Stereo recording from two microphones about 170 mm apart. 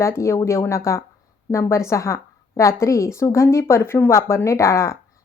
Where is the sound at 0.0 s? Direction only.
15° left (ahead or behind).